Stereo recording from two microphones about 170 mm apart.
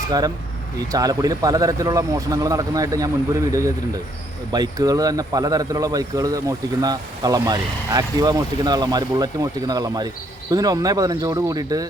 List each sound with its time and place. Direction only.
0.9 s speech: 20° right (ahead or behind)